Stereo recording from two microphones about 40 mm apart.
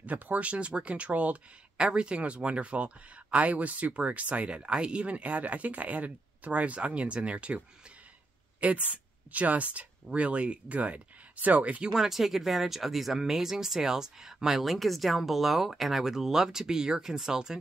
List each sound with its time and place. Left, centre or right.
0.0 s speech: right
1.8 s a woman's voice: right
11.8 s speech: centre
14.6 s speech: centre